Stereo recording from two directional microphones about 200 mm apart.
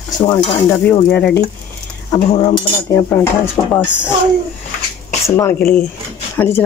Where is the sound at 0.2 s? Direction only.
25° left (ahead or behind).